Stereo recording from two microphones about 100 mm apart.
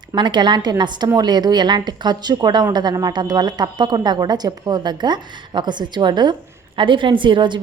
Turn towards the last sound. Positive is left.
turn(degrees=-50)  # may be behind; listen again after turning